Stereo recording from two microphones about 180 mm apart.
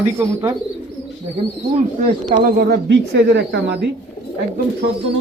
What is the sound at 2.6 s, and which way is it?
Speech, 65° right (ahead or behind).